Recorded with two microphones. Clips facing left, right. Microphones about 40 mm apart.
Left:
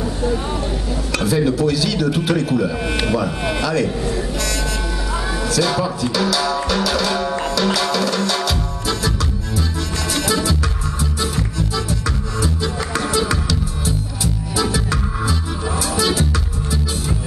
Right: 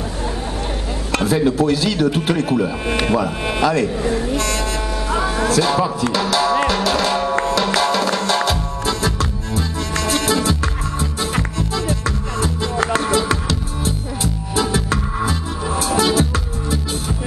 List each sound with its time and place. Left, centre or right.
1.1 s a sound: right
1.6 s a man's voice: right
2.5 s speech: centre
5.1 s music: right
6.1 s a man's voice: right
6.7 s music: right
10.1 s music: right